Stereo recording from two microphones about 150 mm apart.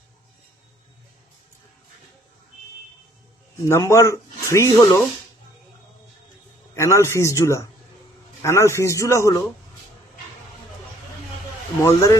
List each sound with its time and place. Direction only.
3.7 s a man's voice: 20° left (ahead or behind)
6.7 s a man's voice: 20° left (ahead or behind)
11.8 s a man's voice: 20° left (ahead or behind)